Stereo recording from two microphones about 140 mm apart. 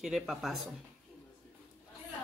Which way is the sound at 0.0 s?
Centre (ahead or behind).